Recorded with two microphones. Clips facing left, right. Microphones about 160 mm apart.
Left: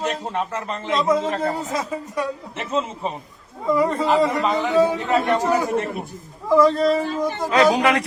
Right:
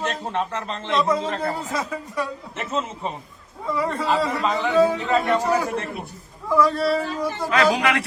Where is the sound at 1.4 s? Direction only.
20° left (ahead or behind).